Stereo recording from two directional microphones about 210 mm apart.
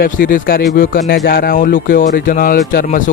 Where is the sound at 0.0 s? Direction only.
40° left (ahead or behind).